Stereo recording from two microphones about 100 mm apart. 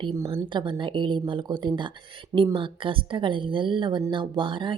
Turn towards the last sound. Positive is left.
turn(degrees=-55)  # may be behind; listen again after turning